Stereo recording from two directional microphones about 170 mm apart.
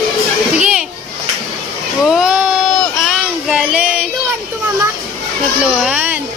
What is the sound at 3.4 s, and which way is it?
Child singing, 5° right (ahead or behind).